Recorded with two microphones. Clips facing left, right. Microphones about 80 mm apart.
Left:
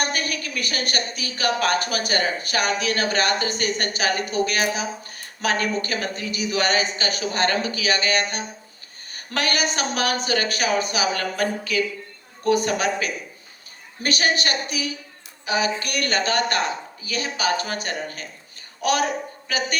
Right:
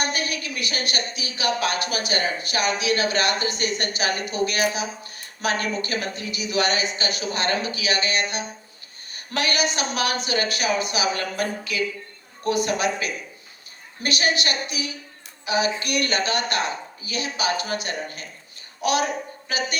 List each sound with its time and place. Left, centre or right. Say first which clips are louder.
0.0 s a woman's voice: left 1 dB; left